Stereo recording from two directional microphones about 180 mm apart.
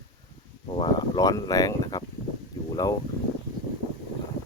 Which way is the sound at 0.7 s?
25° left (ahead or behind).